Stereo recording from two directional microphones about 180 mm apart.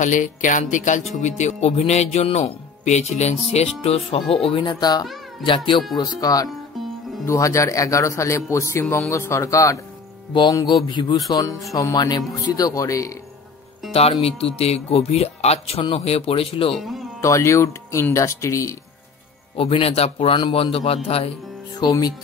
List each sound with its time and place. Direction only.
0.0 s speech: 45° left (ahead or behind); by 13.1 s 15° left (ahead or behind)
14.2 s speech: 35° left (ahead or behind)
16.7 s speech: centre (ahead or behind)
17.2 s speech: 15° left (ahead or behind)
19.5 s speech: 30° left (ahead or behind)